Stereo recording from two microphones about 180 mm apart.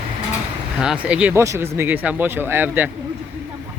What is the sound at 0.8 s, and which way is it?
Speech, 5° right (ahead or behind).